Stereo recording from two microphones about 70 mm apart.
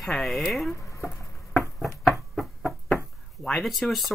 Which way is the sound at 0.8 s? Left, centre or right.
Left.